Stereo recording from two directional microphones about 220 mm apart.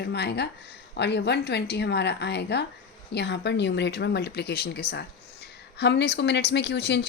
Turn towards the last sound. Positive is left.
turn(degrees=50)  # may be behind; listen again after turning